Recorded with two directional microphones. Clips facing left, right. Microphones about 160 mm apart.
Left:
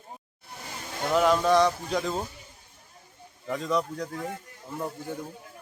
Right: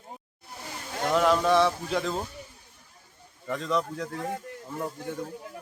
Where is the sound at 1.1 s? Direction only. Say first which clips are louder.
Left 1 dB; centre (ahead or behind).